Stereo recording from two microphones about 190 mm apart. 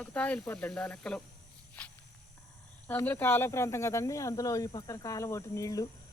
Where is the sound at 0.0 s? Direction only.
10° left (ahead or behind).